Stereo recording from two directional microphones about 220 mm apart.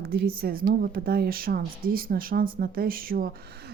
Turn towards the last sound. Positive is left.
turn(degrees=-40)  # may be behind; listen again after turning